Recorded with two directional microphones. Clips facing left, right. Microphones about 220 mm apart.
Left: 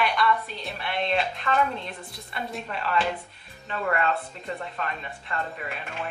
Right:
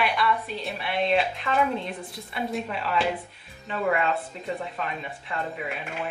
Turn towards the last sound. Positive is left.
turn(degrees=-5)  # may be behind; listen again after turning